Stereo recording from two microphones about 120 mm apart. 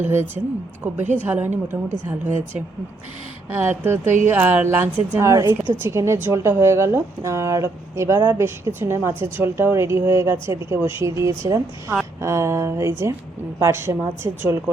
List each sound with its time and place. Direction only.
0.0 s a woman's voice: 20° right (ahead or behind)
3.5 s a woman's voice: 15° right (ahead or behind)